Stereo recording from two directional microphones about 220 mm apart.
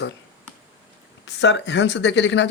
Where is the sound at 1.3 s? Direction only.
55° left (ahead or behind).